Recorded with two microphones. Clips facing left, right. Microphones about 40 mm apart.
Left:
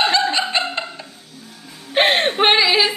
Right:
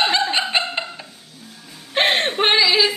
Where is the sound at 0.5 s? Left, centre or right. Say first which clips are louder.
Even; centre.